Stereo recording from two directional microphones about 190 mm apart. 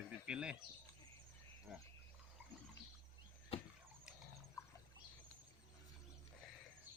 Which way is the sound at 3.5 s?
30° left (ahead or behind).